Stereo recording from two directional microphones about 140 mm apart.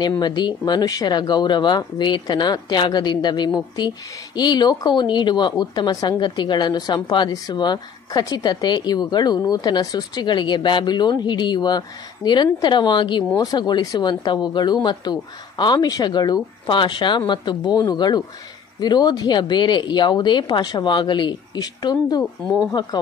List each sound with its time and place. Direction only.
0.2 s speech: 30° left (ahead or behind)